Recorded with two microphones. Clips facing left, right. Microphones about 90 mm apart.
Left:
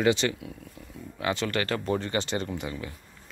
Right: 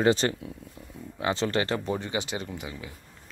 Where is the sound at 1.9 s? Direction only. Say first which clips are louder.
Left 2 dB; 10° right (ahead or behind).